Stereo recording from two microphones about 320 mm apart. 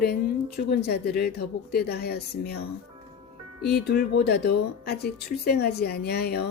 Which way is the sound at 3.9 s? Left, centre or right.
Left.